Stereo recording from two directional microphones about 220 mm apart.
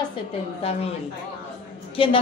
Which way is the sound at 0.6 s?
25° left (ahead or behind).